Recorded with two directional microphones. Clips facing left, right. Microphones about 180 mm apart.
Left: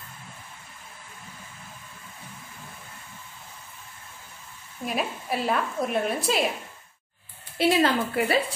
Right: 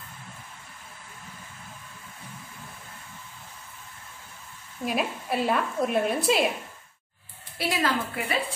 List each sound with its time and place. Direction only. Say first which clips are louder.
4.8 s a woman's voice: right 1 dB; centre (ahead or behind)
7.5 s a woman's voice: left 5 dB; 30° left (ahead or behind)